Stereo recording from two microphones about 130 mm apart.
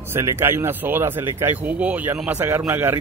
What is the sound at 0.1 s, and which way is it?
Speech, 20° right (ahead or behind).